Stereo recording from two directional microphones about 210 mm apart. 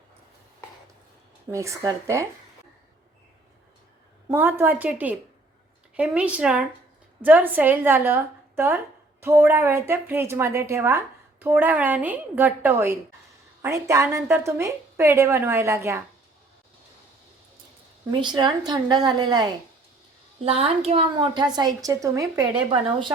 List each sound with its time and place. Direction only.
1.5 s a woman's voice: 15° right (ahead or behind)
4.3 s a woman's voice: 10° right (ahead or behind)
18.1 s a woman's voice: 20° right (ahead or behind)